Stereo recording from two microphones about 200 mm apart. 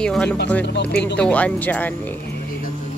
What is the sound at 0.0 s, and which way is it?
Speech, 5° left (ahead or behind).